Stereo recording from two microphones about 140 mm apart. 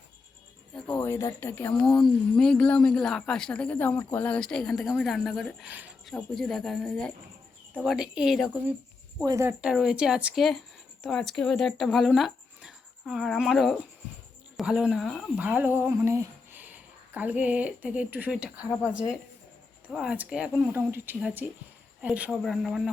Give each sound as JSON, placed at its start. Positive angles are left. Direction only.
{"t": 0.7, "sound": "speech", "side_deg": 5}
{"t": 1.0, "sound": "speech", "side_deg": 20}
{"t": 1.7, "sound": "speech", "side_deg": 5}
{"t": 7.7, "sound": "speech", "side_deg": -5}
{"t": 9.2, "sound": "speech", "side_deg": -20}